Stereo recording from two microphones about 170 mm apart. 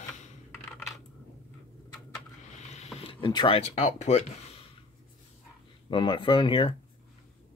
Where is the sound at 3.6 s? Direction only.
40° left (ahead or behind).